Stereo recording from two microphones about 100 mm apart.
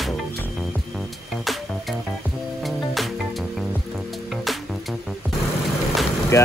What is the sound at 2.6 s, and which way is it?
Music, centre (ahead or behind).